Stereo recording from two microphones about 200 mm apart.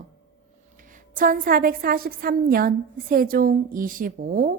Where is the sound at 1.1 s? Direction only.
45° right (ahead or behind).